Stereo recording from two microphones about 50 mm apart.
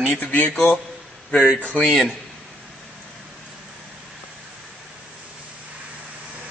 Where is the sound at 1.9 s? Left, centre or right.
Centre.